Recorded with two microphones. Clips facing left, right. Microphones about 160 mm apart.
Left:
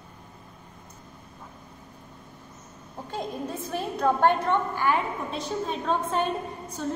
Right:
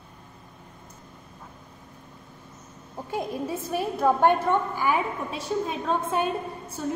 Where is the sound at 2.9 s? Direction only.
10° right (ahead or behind).